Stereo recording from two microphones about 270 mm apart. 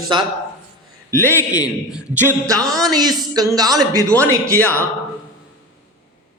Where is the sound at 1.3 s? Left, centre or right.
Centre.